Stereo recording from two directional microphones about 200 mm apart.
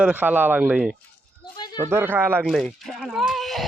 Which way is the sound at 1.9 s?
10° right (ahead or behind).